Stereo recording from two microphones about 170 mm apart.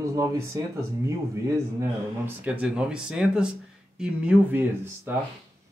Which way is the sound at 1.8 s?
10° right (ahead or behind).